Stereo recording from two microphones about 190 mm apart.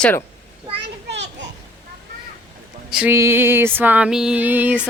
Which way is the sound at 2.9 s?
10° right (ahead or behind).